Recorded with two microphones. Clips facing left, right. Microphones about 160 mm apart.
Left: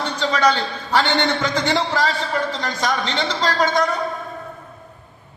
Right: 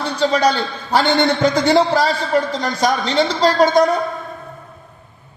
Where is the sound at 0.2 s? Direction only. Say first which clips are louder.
Right 3 dB; 40° right (ahead or behind).